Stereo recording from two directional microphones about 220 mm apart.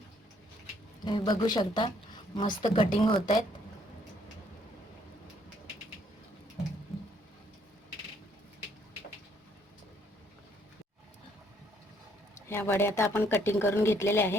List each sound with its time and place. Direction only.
1.0 s speech: 20° left (ahead or behind)
12.5 s speech: 10° left (ahead or behind)